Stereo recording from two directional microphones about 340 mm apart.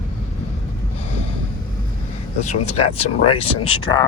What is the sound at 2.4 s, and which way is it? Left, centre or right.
Speech, centre.